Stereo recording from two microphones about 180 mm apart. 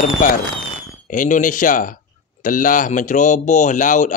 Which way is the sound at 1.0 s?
45° left (ahead or behind).